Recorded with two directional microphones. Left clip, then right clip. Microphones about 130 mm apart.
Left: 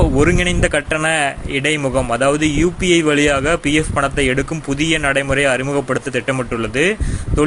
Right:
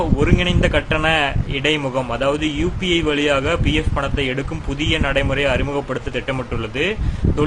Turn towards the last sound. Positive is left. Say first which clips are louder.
# left 3 dB
turn(degrees=25)  # may be behind; listen again after turning